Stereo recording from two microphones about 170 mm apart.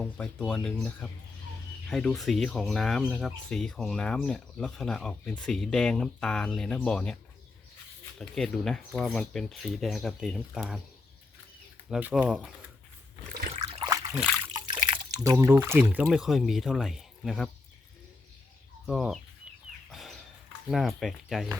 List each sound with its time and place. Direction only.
0.0 s speech: 5° left (ahead or behind)
8.2 s speech: 5° left (ahead or behind)
11.9 s speech: 5° right (ahead or behind)
13.5 s water: 35° right (ahead or behind)
13.8 s a sound: 20° right (ahead or behind)
14.5 s water: 25° right (ahead or behind)
15.4 s speech: 15° right (ahead or behind)
18.9 s speech: centre (ahead or behind)
19.9 s a sound: centre (ahead or behind)
20.7 s speech: centre (ahead or behind)